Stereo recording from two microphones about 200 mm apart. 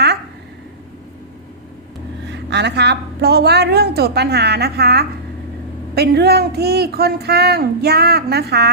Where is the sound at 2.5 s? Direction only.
60° right (ahead or behind).